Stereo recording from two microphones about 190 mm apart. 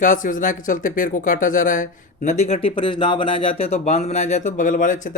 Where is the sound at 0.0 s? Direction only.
45° left (ahead or behind).